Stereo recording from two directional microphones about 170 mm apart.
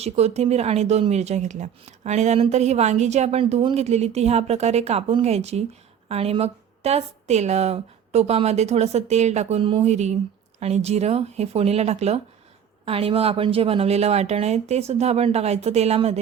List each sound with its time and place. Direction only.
0.0 s speech: 40° right (ahead or behind)
9.9 s speech: 40° right (ahead or behind)